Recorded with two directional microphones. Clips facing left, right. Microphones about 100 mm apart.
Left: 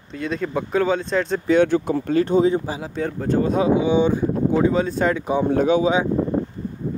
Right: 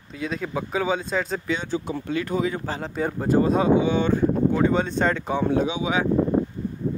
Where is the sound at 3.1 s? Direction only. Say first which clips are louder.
Right 1 dB; 5° right (ahead or behind); by 4.7 s 15° left (ahead or behind).